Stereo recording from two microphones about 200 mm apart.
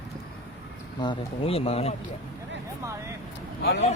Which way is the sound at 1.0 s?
25° left (ahead or behind).